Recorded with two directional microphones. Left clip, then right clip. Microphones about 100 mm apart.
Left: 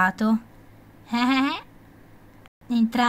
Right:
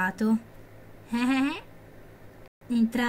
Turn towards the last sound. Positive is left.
turn(degrees=50)  # may be behind; listen again after turning